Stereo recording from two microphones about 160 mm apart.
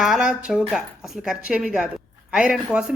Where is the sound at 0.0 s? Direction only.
5° right (ahead or behind).